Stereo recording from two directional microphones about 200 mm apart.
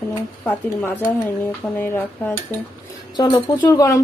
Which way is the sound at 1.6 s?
15° left (ahead or behind).